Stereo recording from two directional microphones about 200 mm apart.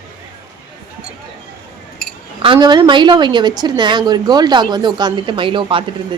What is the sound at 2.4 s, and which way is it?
A woman's voice, 25° right (ahead or behind).